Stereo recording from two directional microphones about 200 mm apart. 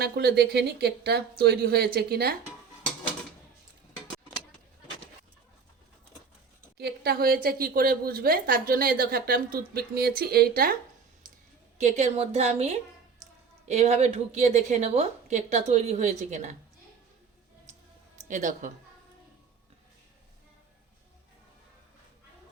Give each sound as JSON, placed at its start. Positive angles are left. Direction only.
{"t": 0.0, "sound": "a woman's voice", "side_deg": -50}
{"t": 6.7, "sound": "a woman's voice", "side_deg": -50}
{"t": 11.8, "sound": "a woman's voice", "side_deg": -35}
{"t": 18.2, "sound": "speech", "side_deg": -40}